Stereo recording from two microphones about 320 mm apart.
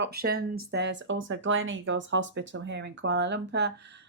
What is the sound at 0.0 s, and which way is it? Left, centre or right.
Speech, right.